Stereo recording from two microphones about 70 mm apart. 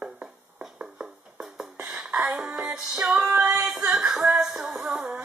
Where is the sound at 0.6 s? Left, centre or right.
Centre.